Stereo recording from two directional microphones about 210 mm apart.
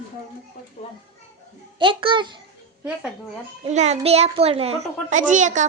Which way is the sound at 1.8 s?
25° right (ahead or behind).